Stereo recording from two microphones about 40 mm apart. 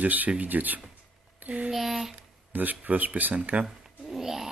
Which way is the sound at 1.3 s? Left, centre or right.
Right.